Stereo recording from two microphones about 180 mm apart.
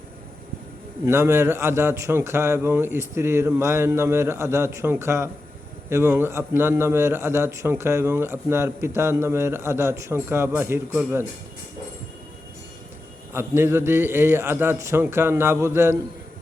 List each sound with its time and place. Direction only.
1.0 s a man's voice: 15° right (ahead or behind)
13.3 s a man's voice: 15° right (ahead or behind)